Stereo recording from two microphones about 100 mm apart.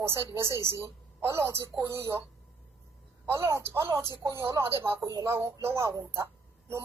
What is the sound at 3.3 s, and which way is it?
A woman's voice, 30° right (ahead or behind).